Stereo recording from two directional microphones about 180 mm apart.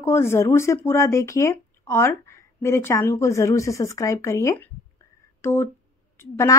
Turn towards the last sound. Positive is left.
turn(degrees=15)  # may be behind; listen again after turning